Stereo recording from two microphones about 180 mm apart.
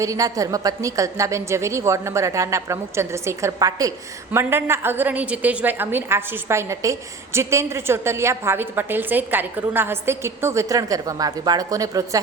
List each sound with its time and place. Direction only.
0.0 s a woman's voice: 20° right (ahead or behind)